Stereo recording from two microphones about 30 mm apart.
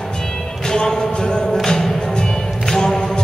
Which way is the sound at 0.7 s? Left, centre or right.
Left.